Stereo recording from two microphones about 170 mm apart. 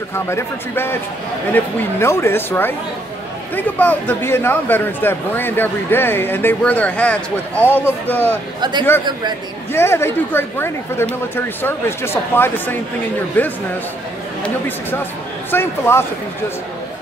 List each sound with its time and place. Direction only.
0.1 s a man's voice: 15° left (ahead or behind)
8.5 s speech: 25° right (ahead or behind)
9.7 s a man's voice: 15° left (ahead or behind)
15.5 s a man's voice: 15° left (ahead or behind)